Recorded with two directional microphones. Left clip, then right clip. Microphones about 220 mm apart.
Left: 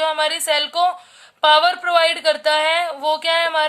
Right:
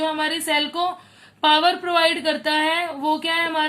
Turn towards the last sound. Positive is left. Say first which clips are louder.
# left 4 dB
turn(degrees=45)  # may be behind; listen again after turning